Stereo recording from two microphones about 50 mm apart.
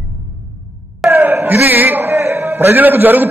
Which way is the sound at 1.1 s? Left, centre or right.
Right.